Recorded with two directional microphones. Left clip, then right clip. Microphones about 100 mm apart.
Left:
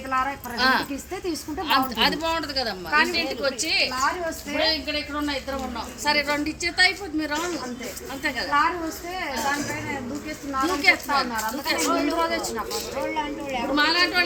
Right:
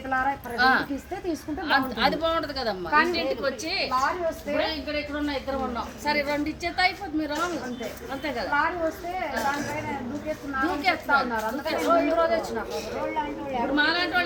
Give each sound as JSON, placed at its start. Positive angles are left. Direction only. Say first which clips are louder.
{"t": 0.6, "sound": "a woman's voice", "louder": "even", "side_deg": -20}
{"t": 10.6, "sound": "a woman's voice", "louder": "left 5 dB", "side_deg": -10}